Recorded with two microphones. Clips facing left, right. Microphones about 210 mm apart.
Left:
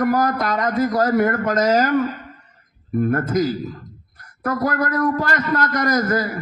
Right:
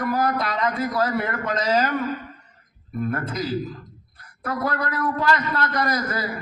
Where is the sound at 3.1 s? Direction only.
45° left (ahead or behind).